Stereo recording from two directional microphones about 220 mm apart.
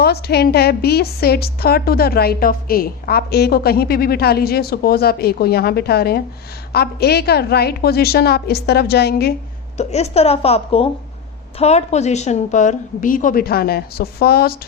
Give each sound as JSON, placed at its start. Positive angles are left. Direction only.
{"t": 0.0, "sound": "a woman's voice", "side_deg": 45}
{"t": 9.7, "sound": "a woman's voice", "side_deg": 30}